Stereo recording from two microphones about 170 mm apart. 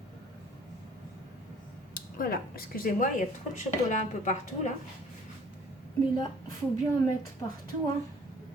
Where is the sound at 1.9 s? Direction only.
60° left (ahead or behind).